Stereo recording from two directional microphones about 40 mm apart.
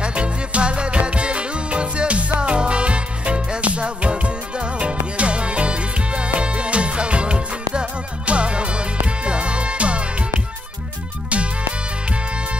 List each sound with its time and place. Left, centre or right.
0.0 s music: right